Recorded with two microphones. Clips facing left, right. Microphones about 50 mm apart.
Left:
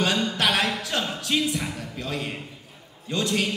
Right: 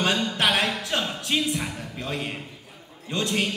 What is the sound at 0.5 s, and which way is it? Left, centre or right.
Music, centre.